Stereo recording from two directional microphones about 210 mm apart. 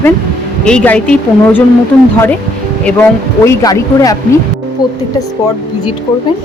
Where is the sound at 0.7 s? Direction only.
5° left (ahead or behind).